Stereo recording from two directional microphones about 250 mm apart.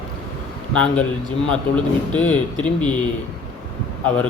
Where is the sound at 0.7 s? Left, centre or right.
Centre.